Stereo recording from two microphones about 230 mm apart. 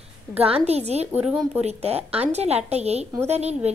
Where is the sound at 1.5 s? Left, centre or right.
Right.